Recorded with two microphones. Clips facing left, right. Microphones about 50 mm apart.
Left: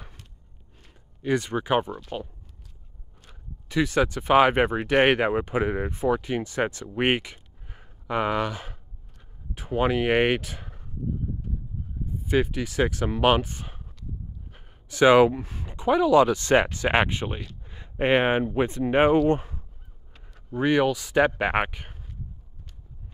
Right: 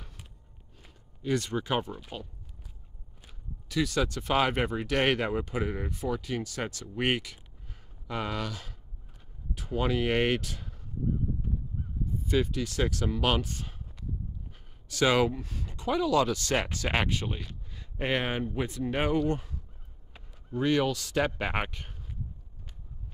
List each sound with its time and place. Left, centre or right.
1.2 s speech: left
3.6 s speech: left
12.3 s speech: left
20.5 s speech: left